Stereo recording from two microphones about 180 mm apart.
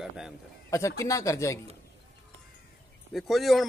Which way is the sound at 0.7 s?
15° left (ahead or behind).